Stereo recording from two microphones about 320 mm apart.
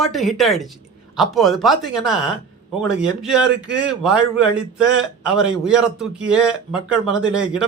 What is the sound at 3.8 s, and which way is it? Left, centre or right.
A man's voice, centre.